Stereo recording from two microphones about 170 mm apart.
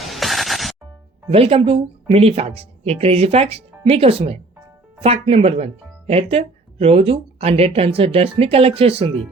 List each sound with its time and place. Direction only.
0.0 s music: centre (ahead or behind)
1.3 s speech: 35° right (ahead or behind)